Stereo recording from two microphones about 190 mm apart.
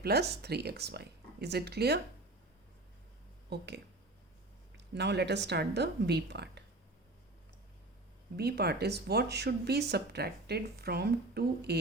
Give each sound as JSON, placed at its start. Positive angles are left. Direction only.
{"t": 0.0, "sound": "speech", "side_deg": -55}
{"t": 3.5, "sound": "speech", "side_deg": -60}
{"t": 4.9, "sound": "speech", "side_deg": -65}
{"t": 8.4, "sound": "speech", "side_deg": -60}